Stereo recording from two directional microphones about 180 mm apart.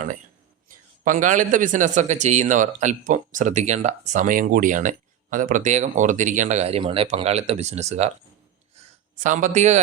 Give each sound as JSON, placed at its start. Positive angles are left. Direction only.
{"t": 1.0, "sound": "speech", "side_deg": -45}
{"t": 9.1, "sound": "speech", "side_deg": -45}